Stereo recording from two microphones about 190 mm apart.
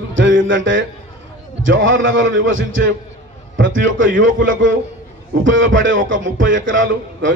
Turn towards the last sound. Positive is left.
turn(degrees=-85)